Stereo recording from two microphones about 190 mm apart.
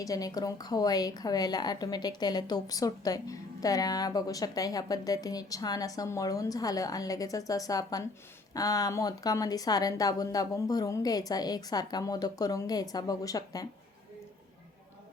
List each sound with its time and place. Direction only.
0.0 s a woman's voice: 20° left (ahead or behind)